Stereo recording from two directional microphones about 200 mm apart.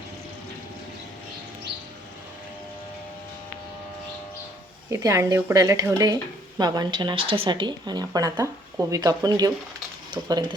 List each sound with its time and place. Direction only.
4.9 s a woman's voice: 15° right (ahead or behind)